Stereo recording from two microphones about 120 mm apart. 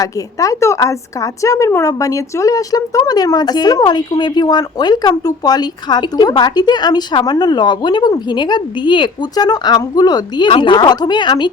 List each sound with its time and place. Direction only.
0.0 s a woman's voice: 30° left (ahead or behind)